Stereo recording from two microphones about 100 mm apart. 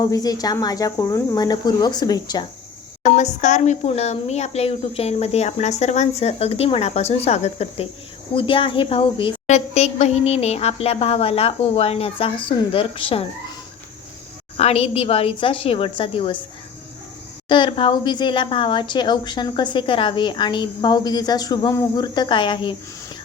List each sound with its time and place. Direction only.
0.0 s speech: 40° left (ahead or behind)
3.8 s speech: 90° left
8.4 s a woman's voice: 60° left (ahead or behind)
9.7 s a woman's voice: 90° left; by 13.2 s 65° left (ahead or behind)
14.5 s a woman's voice: 90° left; by 16.4 s 60° left (ahead or behind)
17.5 s speech: 55° left (ahead or behind)